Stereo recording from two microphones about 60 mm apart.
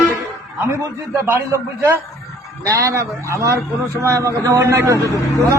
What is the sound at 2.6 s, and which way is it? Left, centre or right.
A man's voice, right.